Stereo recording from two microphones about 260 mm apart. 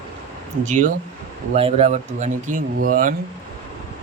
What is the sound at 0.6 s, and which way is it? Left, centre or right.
Speech, right.